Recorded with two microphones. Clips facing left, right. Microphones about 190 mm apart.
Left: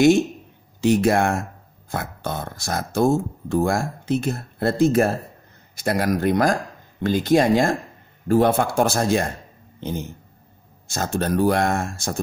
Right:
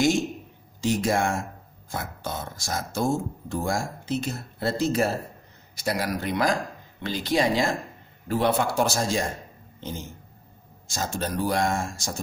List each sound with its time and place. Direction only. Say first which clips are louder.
0.7 s speech: left 6 dB; 60° left (ahead or behind)
10.9 s speech: left 6 dB; 60° left (ahead or behind)